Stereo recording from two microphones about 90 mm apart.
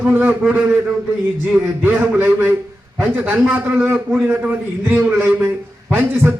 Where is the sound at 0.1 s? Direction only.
20° right (ahead or behind).